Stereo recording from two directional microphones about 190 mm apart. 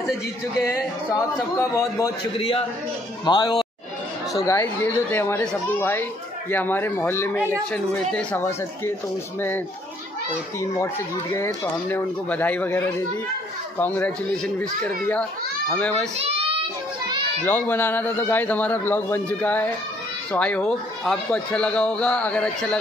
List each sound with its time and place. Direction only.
1.1 s a man's voice: 15° left (ahead or behind)
2.3 s a man's voice: 30° left (ahead or behind); by 8.9 s 15° left (ahead or behind)
11.3 s a man's voice: 10° left (ahead or behind)
16.2 s a sound: 30° right (ahead or behind)
17.5 s a man's voice: 10° left (ahead or behind)